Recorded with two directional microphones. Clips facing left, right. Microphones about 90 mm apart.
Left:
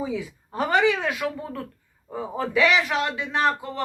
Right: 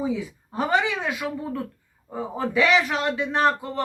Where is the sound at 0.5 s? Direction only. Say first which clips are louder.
Left 2 dB; 20° right (ahead or behind).